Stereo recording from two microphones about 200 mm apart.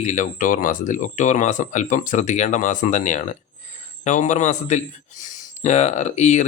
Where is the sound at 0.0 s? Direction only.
40° left (ahead or behind).